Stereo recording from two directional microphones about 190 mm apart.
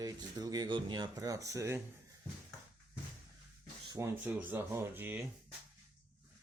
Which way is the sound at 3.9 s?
15° right (ahead or behind).